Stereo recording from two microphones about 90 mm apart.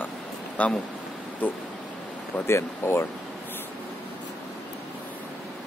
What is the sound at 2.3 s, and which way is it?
Speech, 30° left (ahead or behind).